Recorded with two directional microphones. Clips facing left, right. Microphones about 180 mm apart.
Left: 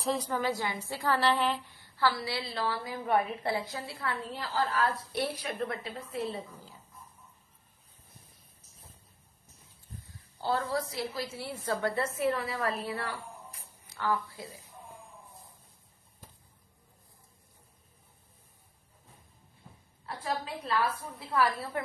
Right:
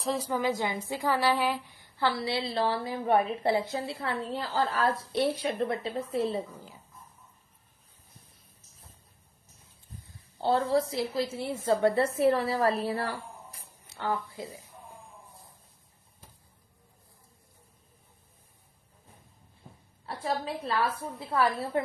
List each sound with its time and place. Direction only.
0.0 s a woman's voice: centre (ahead or behind)
0.3 s a woman's voice: 15° right (ahead or behind)
10.4 s a woman's voice: 25° right (ahead or behind)
21.2 s a woman's voice: 25° right (ahead or behind)